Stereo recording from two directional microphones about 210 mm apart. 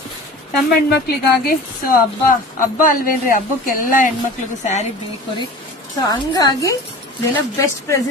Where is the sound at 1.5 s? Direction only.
40° left (ahead or behind).